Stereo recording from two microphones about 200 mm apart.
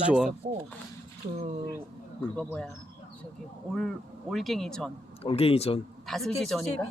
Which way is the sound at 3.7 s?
Centre (ahead or behind).